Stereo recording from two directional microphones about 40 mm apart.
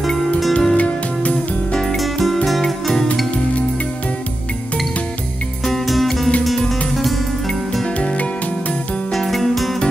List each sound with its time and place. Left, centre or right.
0.5 s music: centre
0.7 s music: left
1.7 s music: centre
2.0 s music: centre
5.7 s music: centre
9.1 s music: centre